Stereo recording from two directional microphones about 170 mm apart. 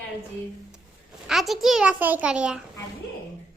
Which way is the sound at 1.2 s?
Centre (ahead or behind).